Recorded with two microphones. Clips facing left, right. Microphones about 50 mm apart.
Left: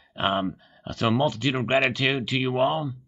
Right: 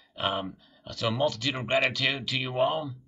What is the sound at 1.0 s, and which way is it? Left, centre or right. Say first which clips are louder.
Speech: left 4 dB; left.